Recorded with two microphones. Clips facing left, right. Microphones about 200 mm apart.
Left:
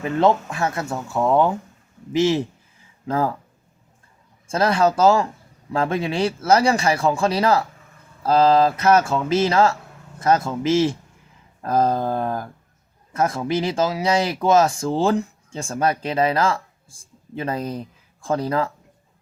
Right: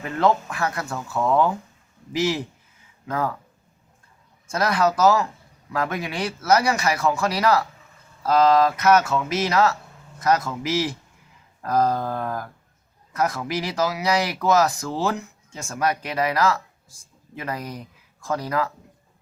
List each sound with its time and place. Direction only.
0.0 s speech: 25° left (ahead or behind)
4.4 s speech: 25° left (ahead or behind)